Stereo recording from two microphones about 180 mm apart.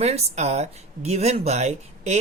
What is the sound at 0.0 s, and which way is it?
Speech, 35° right (ahead or behind).